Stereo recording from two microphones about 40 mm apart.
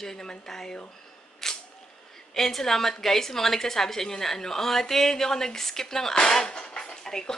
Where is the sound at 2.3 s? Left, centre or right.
Centre.